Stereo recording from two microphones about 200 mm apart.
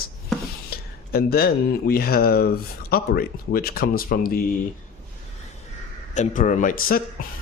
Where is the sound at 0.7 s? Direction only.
50° left (ahead or behind).